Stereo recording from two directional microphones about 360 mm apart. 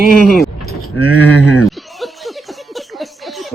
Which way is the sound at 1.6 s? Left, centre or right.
Centre.